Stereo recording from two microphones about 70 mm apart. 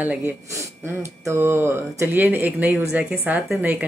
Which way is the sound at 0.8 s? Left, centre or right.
Right.